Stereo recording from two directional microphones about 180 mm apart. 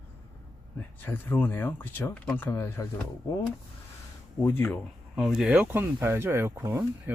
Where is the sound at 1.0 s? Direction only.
10° left (ahead or behind).